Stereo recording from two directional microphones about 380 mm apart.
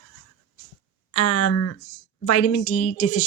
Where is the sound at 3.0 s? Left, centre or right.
Left.